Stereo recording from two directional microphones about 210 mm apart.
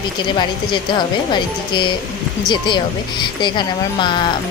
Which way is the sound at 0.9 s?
20° left (ahead or behind).